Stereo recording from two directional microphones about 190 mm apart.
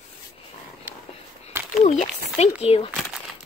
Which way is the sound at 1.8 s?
35° left (ahead or behind).